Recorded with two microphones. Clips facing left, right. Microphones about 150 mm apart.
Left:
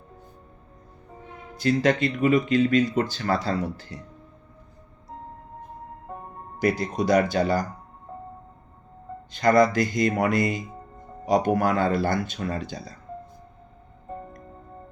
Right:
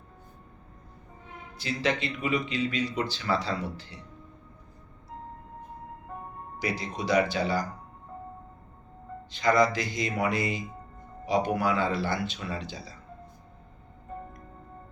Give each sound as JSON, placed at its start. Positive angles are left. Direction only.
{"t": 1.5, "sound": "speech", "side_deg": 50}
{"t": 6.6, "sound": "speech", "side_deg": 50}
{"t": 9.3, "sound": "speech", "side_deg": 50}